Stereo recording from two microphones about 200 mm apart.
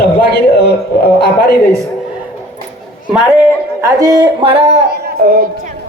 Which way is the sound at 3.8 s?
20° right (ahead or behind).